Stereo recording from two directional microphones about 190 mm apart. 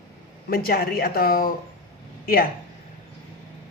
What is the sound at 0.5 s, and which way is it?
Speech, 55° left (ahead or behind).